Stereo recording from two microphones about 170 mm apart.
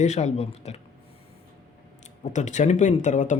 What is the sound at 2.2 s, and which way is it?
Speech, 45° left (ahead or behind).